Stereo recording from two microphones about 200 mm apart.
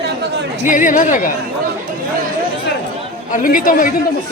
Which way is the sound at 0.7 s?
40° left (ahead or behind).